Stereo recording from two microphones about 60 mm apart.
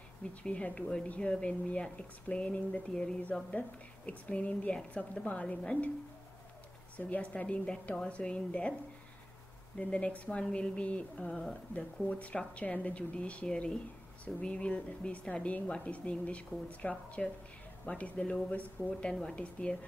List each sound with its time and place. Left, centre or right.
0.3 s a woman's voice: left
7.0 s a woman's voice: left
9.8 s a woman's voice: centre
11.7 s a woman's voice: left